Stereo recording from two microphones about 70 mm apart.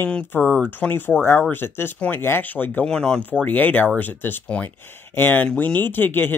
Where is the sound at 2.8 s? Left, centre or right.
Centre.